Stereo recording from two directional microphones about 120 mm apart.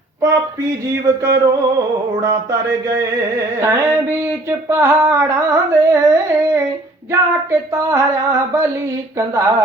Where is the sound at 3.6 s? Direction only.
25° right (ahead or behind).